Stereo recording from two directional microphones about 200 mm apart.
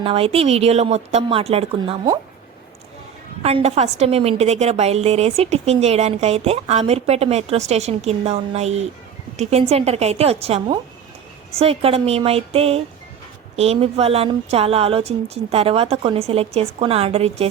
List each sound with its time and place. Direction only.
0.0 s a woman's voice: 30° right (ahead or behind)
3.4 s a woman's voice: 30° right (ahead or behind)